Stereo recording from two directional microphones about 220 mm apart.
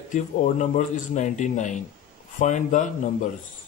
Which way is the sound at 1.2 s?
35° left (ahead or behind).